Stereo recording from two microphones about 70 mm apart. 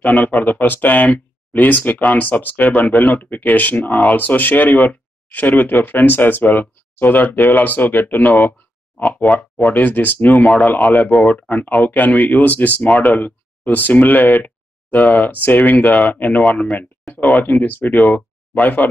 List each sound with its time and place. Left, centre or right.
0.0 s speech: left